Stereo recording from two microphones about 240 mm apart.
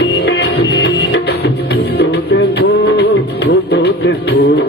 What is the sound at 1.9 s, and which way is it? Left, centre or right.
Music, left.